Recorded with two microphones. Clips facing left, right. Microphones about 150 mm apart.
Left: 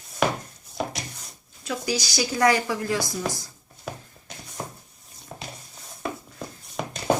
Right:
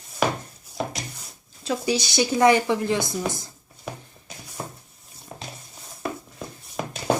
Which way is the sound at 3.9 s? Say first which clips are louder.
Even; centre (ahead or behind).